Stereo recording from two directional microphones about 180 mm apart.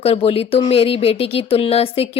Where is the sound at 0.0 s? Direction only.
35° left (ahead or behind).